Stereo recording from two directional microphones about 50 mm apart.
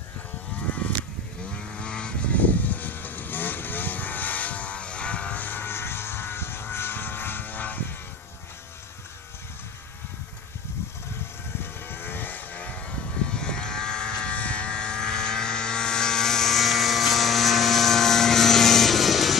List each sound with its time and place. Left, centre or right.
1.5 s vehicle: centre; by 7.8 s left
11.8 s vehicle: left; by 19.3 s centre